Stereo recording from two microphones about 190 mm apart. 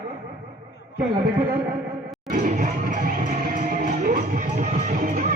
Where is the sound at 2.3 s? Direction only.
40° right (ahead or behind).